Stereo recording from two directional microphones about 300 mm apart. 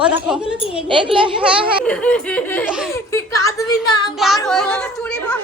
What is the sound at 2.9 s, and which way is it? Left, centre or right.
Speech, centre.